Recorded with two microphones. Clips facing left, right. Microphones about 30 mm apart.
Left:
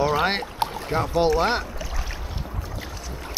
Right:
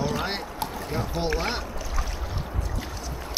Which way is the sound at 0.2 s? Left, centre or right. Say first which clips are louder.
Left 6 dB; left.